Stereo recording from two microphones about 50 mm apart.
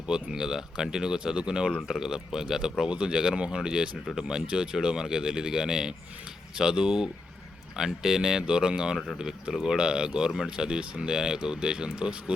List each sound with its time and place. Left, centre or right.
0.1 s speech: centre